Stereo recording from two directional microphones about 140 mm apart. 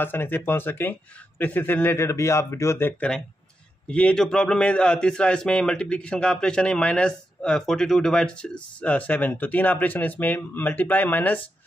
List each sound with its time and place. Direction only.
0.0 s a man's voice: 15° left (ahead or behind)
3.9 s a man's voice: 5° left (ahead or behind)